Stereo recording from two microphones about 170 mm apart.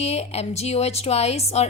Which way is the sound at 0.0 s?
40° left (ahead or behind).